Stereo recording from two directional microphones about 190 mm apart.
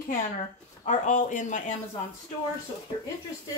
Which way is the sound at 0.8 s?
40° left (ahead or behind).